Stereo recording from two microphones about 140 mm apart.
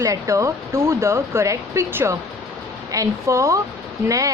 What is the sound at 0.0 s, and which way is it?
Speech, 20° right (ahead or behind).